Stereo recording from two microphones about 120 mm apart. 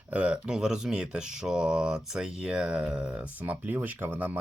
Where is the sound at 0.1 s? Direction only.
10° right (ahead or behind).